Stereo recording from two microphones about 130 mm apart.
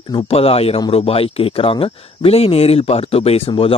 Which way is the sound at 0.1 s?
45° left (ahead or behind).